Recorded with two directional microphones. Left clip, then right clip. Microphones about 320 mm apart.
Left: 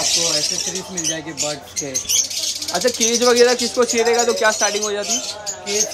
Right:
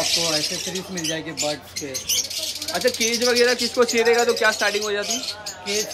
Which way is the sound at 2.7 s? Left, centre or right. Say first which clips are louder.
Left 3 dB; centre.